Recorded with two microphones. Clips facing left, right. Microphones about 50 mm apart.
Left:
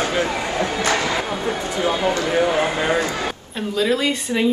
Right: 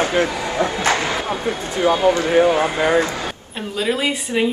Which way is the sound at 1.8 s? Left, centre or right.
Right.